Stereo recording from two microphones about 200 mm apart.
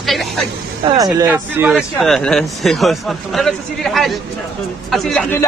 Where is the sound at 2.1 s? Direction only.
5° left (ahead or behind).